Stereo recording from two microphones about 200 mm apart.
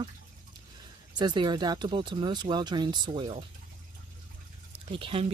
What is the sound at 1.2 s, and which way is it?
Speech, 20° right (ahead or behind).